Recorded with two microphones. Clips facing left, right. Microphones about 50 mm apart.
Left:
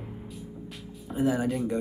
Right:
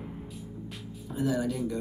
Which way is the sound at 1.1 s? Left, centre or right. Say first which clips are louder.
Left 3 dB; left.